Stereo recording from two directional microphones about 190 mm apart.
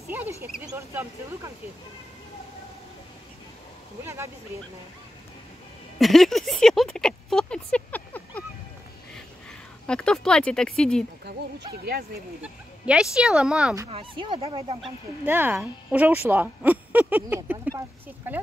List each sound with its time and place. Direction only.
0.1 s speech: 10° right (ahead or behind)
4.0 s speech: 15° right (ahead or behind)
5.9 s a sound: centre (ahead or behind)
9.8 s speech: 5° left (ahead or behind)
11.7 s speech: 55° right (ahead or behind)
12.8 s speech: 5° right (ahead or behind)
13.8 s speech: 30° right (ahead or behind)
14.8 s speech: 10° right (ahead or behind)